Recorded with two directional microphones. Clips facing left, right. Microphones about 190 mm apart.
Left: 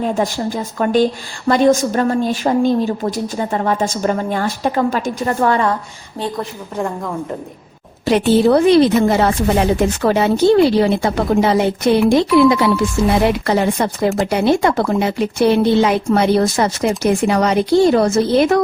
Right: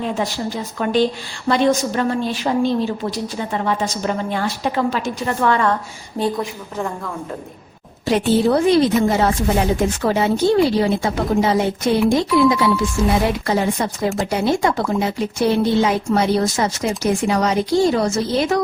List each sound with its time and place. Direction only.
0.0 s a woman's voice: 45° left (ahead or behind)
6.2 s a woman's voice: 15° right (ahead or behind)
6.7 s a woman's voice: 10° left (ahead or behind)
8.0 s speech: 70° left (ahead or behind)